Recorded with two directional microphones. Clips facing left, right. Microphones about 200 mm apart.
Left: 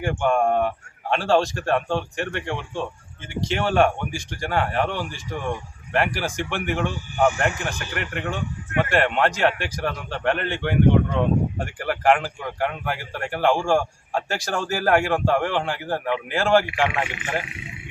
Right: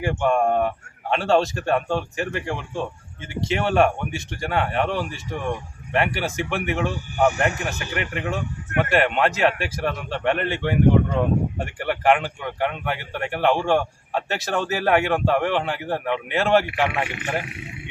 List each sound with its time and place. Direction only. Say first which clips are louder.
0.0 s speech: even; centre (ahead or behind)